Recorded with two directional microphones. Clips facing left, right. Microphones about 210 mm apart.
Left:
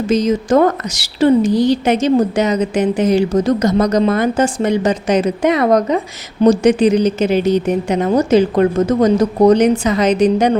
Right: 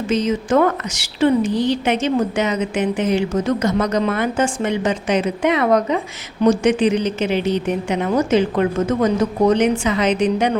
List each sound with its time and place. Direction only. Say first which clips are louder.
0.1 s a woman's voice: left 4 dB; 40° left (ahead or behind)